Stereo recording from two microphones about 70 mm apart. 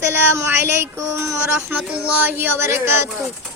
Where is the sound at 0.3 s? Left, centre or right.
Right.